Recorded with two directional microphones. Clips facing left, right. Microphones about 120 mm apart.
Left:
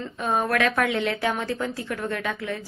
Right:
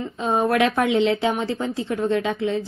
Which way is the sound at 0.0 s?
20° right (ahead or behind).